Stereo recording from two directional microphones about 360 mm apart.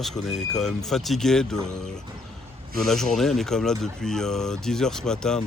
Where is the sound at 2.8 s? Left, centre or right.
Centre.